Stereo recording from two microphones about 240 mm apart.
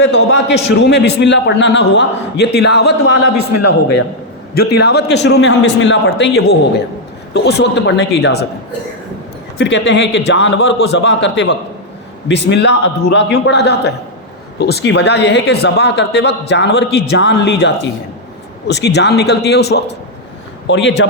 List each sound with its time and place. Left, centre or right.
0.2 s a man's voice: left
4.7 s a man's voice: left
9.6 s a man's voice: left